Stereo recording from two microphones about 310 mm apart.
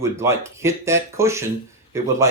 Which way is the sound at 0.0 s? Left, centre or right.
Centre.